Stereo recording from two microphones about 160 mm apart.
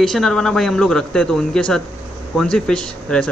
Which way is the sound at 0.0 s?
Centre (ahead or behind).